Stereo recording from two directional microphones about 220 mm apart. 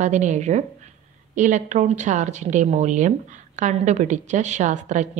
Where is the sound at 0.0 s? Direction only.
35° right (ahead or behind).